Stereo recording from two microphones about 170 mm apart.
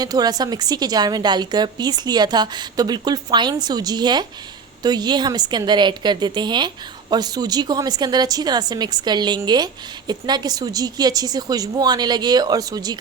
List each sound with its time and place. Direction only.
0.0 s a woman's voice: 25° right (ahead or behind)